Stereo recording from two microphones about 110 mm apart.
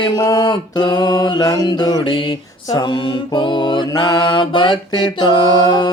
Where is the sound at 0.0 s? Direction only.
35° left (ahead or behind).